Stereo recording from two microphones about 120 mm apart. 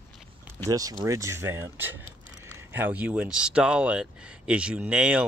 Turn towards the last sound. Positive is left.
turn(degrees=-10)  # may be behind; listen again after turning